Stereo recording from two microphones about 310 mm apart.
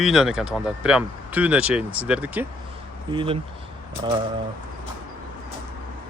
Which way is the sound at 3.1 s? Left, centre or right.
Centre.